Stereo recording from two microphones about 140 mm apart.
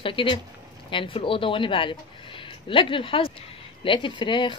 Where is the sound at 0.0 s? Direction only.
40° left (ahead or behind).